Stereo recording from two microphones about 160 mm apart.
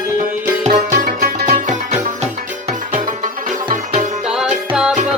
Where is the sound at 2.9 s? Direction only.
60° right (ahead or behind).